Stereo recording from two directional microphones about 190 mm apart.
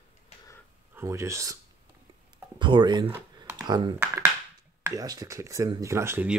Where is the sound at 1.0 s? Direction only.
15° right (ahead or behind).